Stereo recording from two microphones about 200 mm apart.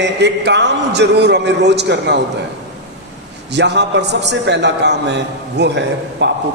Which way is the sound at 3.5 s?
60° right (ahead or behind).